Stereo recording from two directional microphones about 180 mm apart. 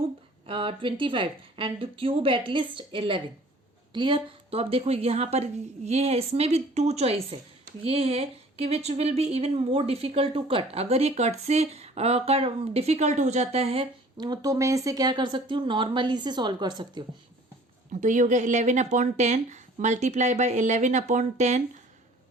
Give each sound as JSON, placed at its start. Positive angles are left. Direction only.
{"t": 0.4, "sound": "a woman's voice", "side_deg": -30}
{"t": 17.9, "sound": "a woman's voice", "side_deg": -40}